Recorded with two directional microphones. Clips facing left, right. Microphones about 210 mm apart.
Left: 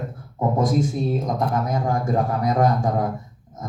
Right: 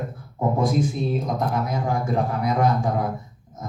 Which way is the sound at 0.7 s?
45° left (ahead or behind).